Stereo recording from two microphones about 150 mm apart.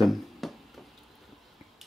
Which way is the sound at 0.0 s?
Centre (ahead or behind).